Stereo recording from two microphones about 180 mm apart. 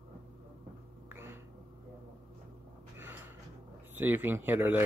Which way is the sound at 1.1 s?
10° right (ahead or behind).